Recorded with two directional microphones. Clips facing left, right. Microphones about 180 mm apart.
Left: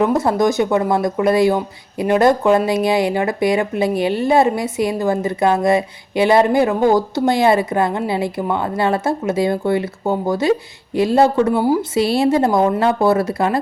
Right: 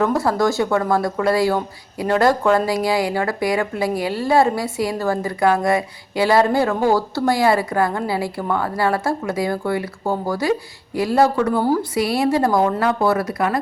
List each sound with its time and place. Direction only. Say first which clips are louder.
0.0 s speech: left 3 dB; 20° left (ahead or behind)
11.6 s a woman's voice: left 2 dB; 15° left (ahead or behind)
11.9 s speech: left 5 dB; 25° left (ahead or behind)